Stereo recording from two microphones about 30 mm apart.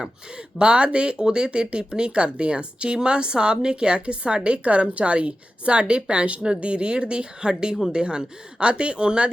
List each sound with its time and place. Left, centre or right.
0.6 s speech: right